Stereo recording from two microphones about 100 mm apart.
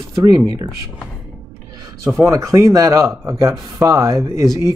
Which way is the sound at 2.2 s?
30° right (ahead or behind).